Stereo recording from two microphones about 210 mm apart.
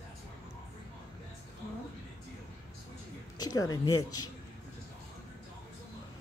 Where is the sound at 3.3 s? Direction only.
15° left (ahead or behind).